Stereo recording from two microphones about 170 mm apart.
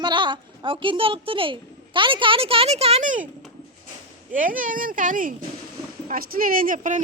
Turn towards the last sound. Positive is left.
turn(degrees=-50)  # may be behind; listen again after turning